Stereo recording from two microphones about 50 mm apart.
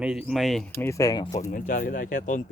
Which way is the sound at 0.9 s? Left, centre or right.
Left.